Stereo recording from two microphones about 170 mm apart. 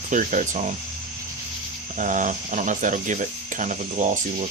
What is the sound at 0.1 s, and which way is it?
Speech, 50° right (ahead or behind).